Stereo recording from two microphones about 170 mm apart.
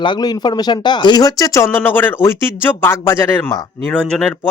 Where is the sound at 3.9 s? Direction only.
5° left (ahead or behind).